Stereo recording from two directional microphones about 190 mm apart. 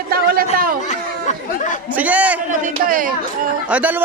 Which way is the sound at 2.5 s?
45° right (ahead or behind).